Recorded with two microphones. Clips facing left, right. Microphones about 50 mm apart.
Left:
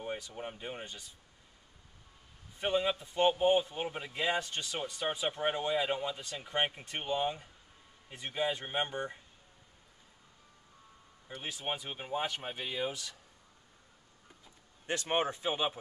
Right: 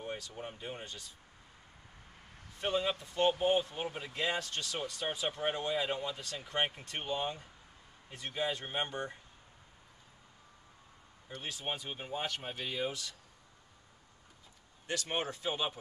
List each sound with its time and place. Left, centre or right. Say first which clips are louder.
0.0 s speech: left 2 dB; centre
2.6 s speech: left 2 dB; centre
11.2 s speech: left 1 dB; centre
14.9 s speech: left 4 dB; left